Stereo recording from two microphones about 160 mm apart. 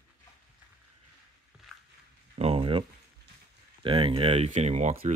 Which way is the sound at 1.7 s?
Centre (ahead or behind).